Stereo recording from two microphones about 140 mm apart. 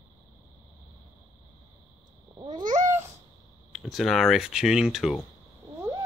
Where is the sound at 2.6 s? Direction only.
65° right (ahead or behind).